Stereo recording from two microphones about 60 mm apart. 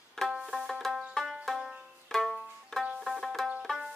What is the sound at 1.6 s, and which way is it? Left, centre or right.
Music, centre.